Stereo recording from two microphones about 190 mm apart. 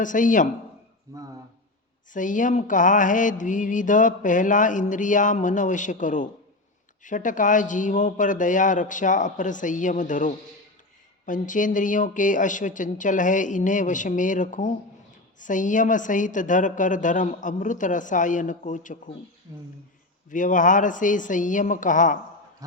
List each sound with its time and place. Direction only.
0.0 s mantra: 45° left (ahead or behind)
2.1 s mantra: 45° left (ahead or behind)
20.3 s mantra: 45° left (ahead or behind)